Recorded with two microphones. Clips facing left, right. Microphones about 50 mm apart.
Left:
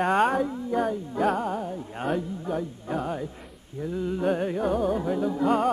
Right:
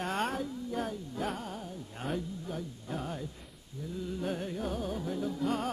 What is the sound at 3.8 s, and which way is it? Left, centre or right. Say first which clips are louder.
Music: left 9 dB; left.